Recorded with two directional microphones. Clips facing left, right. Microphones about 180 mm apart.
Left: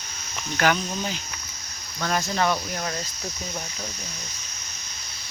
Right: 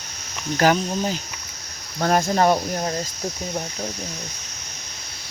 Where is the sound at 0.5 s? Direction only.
35° right (ahead or behind).